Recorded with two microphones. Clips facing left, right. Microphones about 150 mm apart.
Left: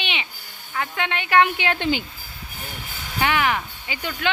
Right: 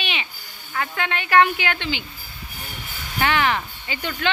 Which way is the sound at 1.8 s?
45° left (ahead or behind).